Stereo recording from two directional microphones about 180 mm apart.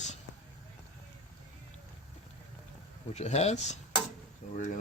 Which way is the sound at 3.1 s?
40° left (ahead or behind).